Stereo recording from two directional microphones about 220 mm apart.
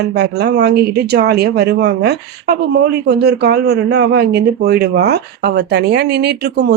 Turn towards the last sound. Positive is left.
turn(degrees=-45)  # may be behind; listen again after turning